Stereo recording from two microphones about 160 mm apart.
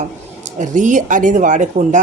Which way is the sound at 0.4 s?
50° right (ahead or behind).